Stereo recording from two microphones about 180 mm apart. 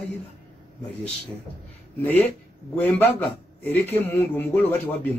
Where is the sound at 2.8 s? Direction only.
10° left (ahead or behind).